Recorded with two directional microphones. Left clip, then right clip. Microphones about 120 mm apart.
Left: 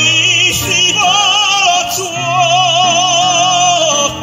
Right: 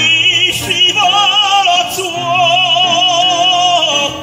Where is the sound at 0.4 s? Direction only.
50° left (ahead or behind).